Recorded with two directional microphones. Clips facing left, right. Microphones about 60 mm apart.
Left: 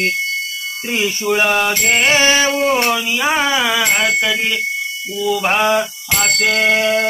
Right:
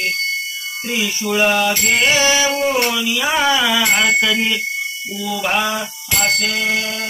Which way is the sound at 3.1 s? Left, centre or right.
Left.